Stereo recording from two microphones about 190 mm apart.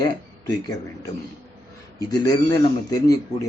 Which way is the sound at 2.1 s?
20° left (ahead or behind).